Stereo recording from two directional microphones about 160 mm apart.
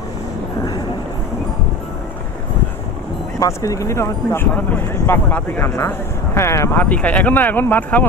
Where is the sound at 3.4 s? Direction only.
20° left (ahead or behind).